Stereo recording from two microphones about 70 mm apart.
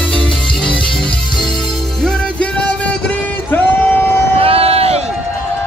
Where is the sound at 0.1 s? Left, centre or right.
Centre; by 4.2 s left.